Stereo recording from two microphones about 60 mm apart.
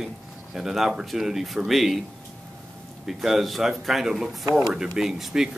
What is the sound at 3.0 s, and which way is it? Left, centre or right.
A man's voice, centre.